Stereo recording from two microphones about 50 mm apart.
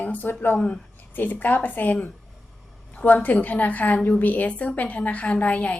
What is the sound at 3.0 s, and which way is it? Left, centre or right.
A woman's voice, left.